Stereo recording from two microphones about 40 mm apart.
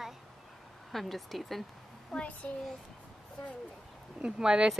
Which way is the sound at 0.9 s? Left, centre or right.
Centre.